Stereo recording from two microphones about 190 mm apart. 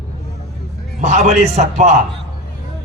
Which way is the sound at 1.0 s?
40° right (ahead or behind).